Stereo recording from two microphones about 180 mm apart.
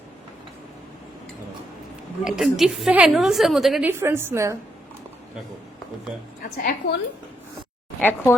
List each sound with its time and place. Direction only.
2.2 s a woman's voice: centre (ahead or behind)
6.4 s a woman's voice: 55° left (ahead or behind)
8.0 s speech: 15° left (ahead or behind)